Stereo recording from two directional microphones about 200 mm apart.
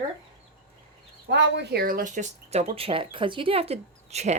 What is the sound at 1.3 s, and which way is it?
Speech, 55° right (ahead or behind).